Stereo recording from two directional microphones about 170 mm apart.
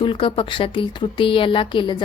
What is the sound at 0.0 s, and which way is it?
Speech, 30° left (ahead or behind).